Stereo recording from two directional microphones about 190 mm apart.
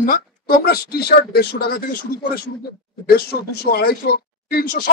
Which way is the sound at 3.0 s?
55° left (ahead or behind).